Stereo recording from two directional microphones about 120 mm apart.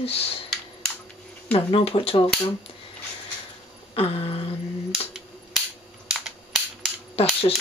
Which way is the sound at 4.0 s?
55° left (ahead or behind).